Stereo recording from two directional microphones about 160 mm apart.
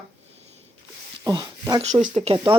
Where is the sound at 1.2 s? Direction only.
25° right (ahead or behind).